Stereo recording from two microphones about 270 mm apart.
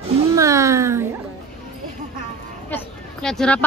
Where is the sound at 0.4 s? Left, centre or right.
Centre.